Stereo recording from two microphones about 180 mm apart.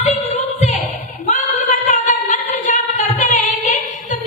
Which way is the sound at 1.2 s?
45° left (ahead or behind).